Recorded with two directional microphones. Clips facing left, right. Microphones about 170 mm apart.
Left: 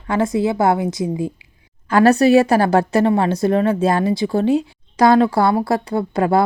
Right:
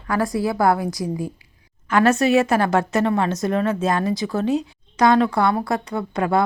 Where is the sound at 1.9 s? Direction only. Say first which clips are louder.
Left 5 dB; 35° left (ahead or behind).